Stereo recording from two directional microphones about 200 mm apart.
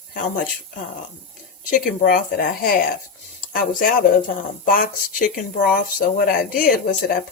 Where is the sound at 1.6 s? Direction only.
40° left (ahead or behind).